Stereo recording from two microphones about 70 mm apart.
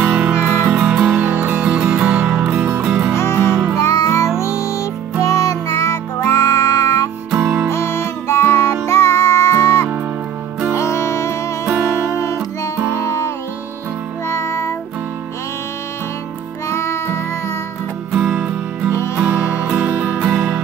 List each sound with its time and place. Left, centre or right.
0.0 s music: centre
2.5 s music: right
2.9 s music: centre
3.2 s music: left
12.9 s music: left
16.6 s music: left
18.1 s music: centre